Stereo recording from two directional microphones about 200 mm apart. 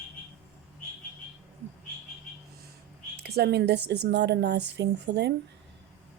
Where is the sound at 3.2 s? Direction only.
55° right (ahead or behind).